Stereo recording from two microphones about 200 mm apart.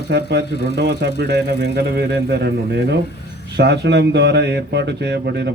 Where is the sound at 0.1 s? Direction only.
55° right (ahead or behind).